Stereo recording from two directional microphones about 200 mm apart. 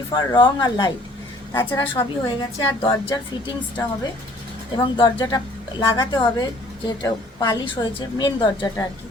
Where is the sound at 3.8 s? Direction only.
20° left (ahead or behind).